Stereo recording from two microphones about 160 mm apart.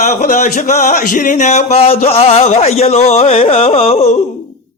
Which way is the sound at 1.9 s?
40° left (ahead or behind).